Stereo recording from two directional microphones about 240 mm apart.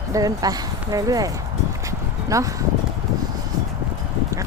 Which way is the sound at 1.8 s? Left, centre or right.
Centre.